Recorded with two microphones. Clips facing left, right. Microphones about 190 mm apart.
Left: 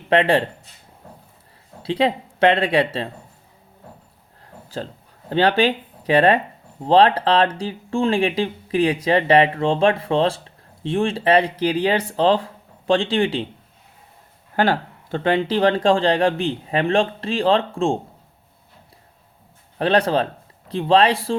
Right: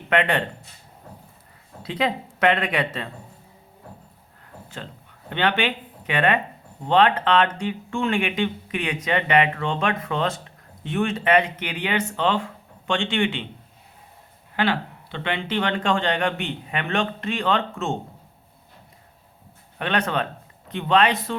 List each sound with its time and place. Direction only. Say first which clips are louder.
0.1 s speech: left 5 dB; 30° left (ahead or behind)
1.8 s speech: left 5 dB; 30° left (ahead or behind)
5.3 s speech: left 6 dB; 35° left (ahead or behind)
14.5 s speech: left 4 dB; 45° left (ahead or behind)
19.8 s speech: left 6 dB; 35° left (ahead or behind)